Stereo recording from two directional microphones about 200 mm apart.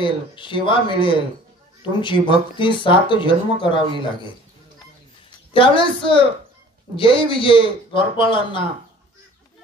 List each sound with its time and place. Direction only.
0.0 s speech: 25° left (ahead or behind)
5.5 s speech: 25° left (ahead or behind)